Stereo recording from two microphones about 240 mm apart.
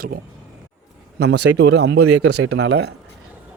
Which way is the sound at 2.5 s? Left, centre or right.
Right.